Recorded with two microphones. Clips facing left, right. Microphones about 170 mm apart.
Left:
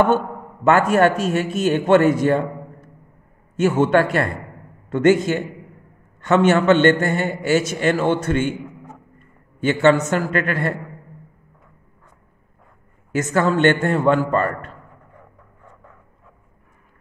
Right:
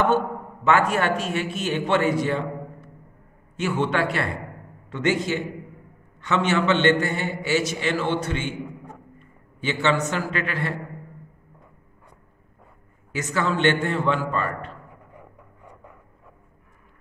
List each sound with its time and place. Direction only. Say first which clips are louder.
0.7 s a man's voice: left 6 dB; 45° left (ahead or behind)
13.1 s a man's voice: left 6 dB; 45° left (ahead or behind)
15.1 s a sound: right 1 dB; 15° right (ahead or behind)